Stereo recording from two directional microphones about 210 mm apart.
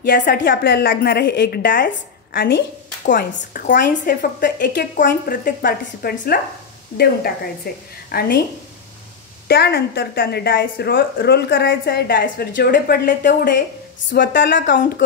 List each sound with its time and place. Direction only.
0.0 s a woman's voice: 50° left (ahead or behind)
2.3 s a woman's voice: 50° left (ahead or behind)
7.7 s a woman's voice: 45° left (ahead or behind)
9.5 s a woman's voice: 50° left (ahead or behind)